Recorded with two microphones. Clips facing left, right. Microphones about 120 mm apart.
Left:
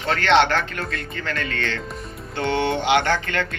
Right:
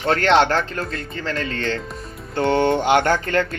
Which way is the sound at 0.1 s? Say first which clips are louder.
Right 1 dB; 40° right (ahead or behind).